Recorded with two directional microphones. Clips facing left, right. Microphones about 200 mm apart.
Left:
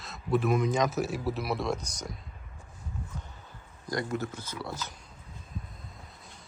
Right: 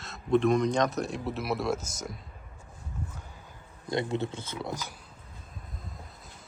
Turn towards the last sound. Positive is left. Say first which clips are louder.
# left 2 dB
turn(degrees=0)  # may be behind; listen again after turning